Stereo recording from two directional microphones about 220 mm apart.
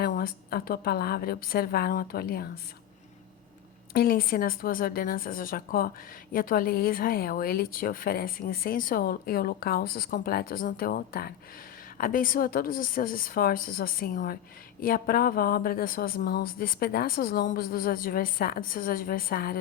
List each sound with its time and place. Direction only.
0.0 s a woman's voice: 40° left (ahead or behind)
3.9 s a woman's voice: 40° left (ahead or behind)